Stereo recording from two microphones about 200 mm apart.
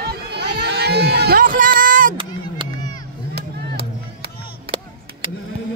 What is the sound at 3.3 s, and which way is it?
Music, 50° right (ahead or behind).